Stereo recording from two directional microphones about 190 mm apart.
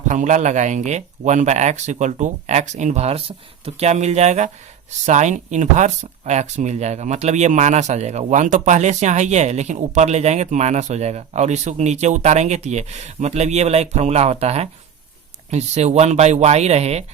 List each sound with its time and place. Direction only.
0.1 s speech: 40° right (ahead or behind)